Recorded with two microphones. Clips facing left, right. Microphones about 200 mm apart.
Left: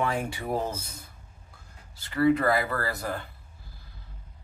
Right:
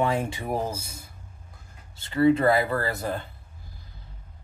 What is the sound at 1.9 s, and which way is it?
Speech, 25° right (ahead or behind).